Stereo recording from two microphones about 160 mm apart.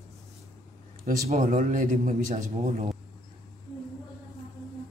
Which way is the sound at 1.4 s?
55° right (ahead or behind).